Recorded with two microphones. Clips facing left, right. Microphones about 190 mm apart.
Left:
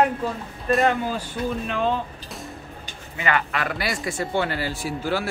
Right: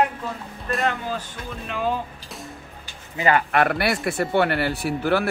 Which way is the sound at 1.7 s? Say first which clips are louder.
Left 2 dB; 5° right (ahead or behind).